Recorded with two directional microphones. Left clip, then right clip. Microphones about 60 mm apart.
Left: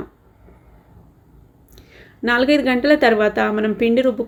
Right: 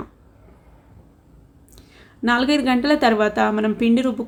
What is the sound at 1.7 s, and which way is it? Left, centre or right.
A woman's voice, right.